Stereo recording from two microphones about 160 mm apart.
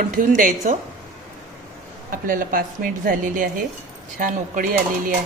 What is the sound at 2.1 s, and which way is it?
A woman's voice, 60° right (ahead or behind).